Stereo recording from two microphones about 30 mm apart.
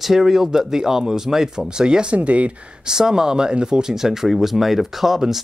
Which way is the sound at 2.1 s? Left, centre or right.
Right.